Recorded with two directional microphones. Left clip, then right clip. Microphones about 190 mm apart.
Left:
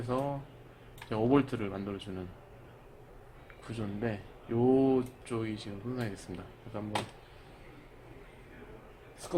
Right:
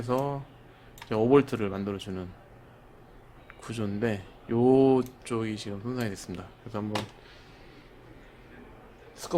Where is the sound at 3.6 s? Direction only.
40° right (ahead or behind).